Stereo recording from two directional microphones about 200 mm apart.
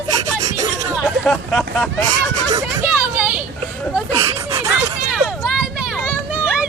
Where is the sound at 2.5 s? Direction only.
15° right (ahead or behind).